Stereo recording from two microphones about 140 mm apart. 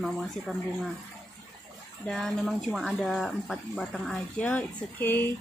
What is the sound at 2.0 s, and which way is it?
Speech, 5° left (ahead or behind).